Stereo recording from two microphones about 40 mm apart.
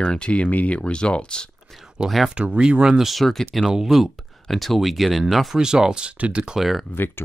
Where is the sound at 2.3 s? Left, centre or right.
Right.